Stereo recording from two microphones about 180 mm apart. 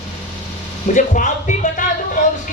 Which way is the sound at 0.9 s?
45° left (ahead or behind).